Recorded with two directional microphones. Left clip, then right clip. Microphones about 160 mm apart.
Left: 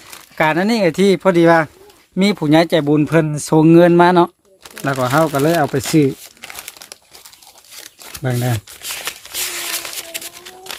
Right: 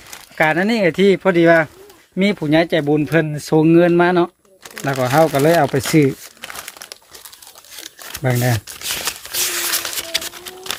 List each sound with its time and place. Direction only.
0.3 s speech: 20° left (ahead or behind)
4.6 s speech: 10° left (ahead or behind)
6.4 s crumpling: 10° right (ahead or behind)
8.2 s speech: centre (ahead or behind)
8.5 s shuffling cards: 40° right (ahead or behind)
9.6 s a sound: 35° right (ahead or behind)